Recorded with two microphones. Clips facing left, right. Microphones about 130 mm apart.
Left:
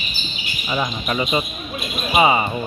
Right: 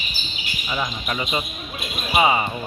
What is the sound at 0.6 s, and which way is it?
Speech, 20° left (ahead or behind).